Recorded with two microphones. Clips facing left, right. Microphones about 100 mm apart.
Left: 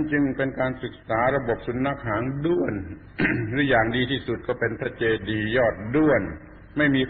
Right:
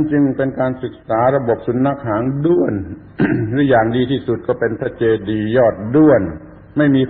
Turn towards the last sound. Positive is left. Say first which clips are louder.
# right 9 dB
turn(degrees=-35)  # may be behind; listen again after turning